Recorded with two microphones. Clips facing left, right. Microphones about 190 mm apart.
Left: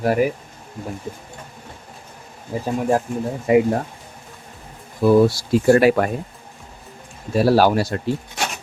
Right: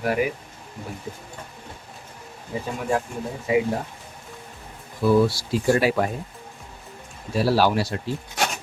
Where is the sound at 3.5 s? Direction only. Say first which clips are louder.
Left 6 dB; 55° left (ahead or behind).